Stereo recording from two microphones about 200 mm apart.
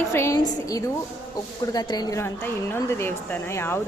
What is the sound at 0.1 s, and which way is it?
A woman's voice, 15° left (ahead or behind).